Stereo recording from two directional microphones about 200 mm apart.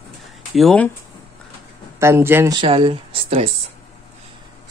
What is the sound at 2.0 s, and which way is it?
Speech, 15° right (ahead or behind).